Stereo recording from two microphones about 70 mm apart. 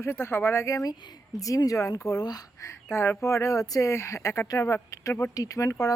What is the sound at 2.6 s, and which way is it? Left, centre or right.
Speech, left.